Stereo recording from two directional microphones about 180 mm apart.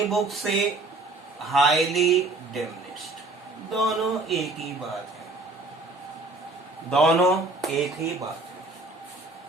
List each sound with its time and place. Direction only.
0.0 s speech: centre (ahead or behind)
3.7 s speech: centre (ahead or behind)
6.9 s speech: centre (ahead or behind)